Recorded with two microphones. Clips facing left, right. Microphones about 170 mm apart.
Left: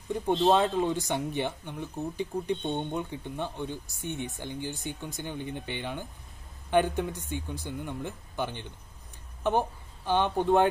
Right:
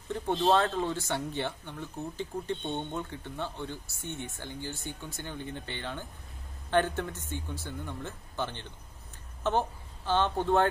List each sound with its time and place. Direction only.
0.5 s speech: 15° left (ahead or behind)